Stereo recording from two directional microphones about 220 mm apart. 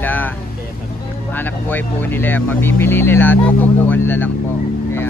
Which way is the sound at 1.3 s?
10° left (ahead or behind).